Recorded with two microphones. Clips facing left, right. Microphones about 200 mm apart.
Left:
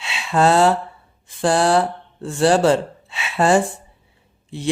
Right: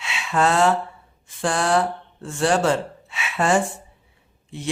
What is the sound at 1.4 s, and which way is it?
A woman's voice, 35° left (ahead or behind).